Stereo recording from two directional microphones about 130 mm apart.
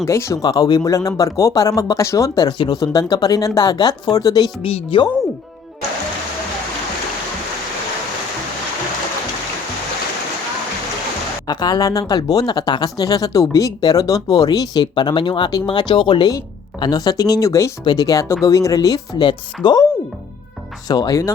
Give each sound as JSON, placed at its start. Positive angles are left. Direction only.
{"t": 0.0, "sound": "speech", "side_deg": 20}
{"t": 4.6, "sound": "speech", "side_deg": 45}
{"t": 11.4, "sound": "speech", "side_deg": 30}
{"t": 20.8, "sound": "speech", "side_deg": 30}